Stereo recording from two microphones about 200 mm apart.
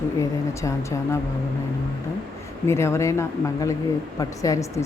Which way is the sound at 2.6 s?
15° left (ahead or behind).